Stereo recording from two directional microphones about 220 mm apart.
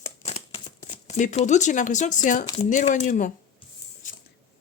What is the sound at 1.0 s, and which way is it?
Speech, 35° left (ahead or behind).